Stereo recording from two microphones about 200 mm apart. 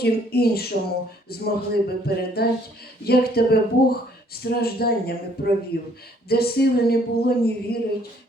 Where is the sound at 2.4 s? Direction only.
50° left (ahead or behind).